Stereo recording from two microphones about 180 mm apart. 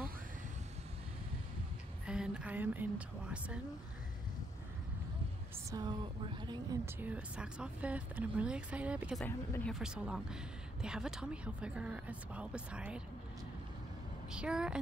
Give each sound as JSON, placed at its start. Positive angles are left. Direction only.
{"t": 2.0, "sound": "speech", "side_deg": -5}
{"t": 5.7, "sound": "speech", "side_deg": -25}
{"t": 7.0, "sound": "speech", "side_deg": -10}
{"t": 9.2, "sound": "speech", "side_deg": 5}
{"t": 9.8, "sound": "speech", "side_deg": -5}
{"t": 14.3, "sound": "speech", "side_deg": -5}